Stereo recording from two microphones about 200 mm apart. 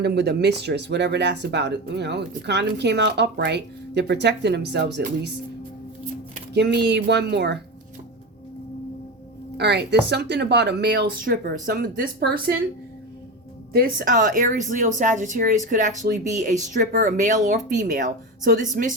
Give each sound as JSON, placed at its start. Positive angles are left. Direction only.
{"t": 0.0, "sound": "speech", "side_deg": -55}
{"t": 6.5, "sound": "speech", "side_deg": -55}
{"t": 9.6, "sound": "speech", "side_deg": -55}
{"t": 13.7, "sound": "speech", "side_deg": -45}